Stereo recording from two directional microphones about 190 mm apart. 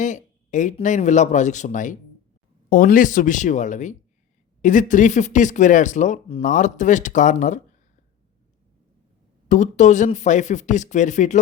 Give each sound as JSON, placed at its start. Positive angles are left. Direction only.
{"t": 0.0, "sound": "speech", "side_deg": 40}
{"t": 9.5, "sound": "speech", "side_deg": 40}